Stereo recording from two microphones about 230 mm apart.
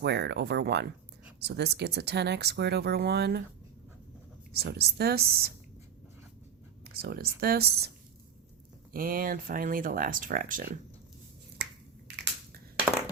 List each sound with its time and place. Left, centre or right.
0.0 s speech: right
4.5 s speech: right
6.8 s speech: right
8.9 s speech: right
11.5 s finger snapping: right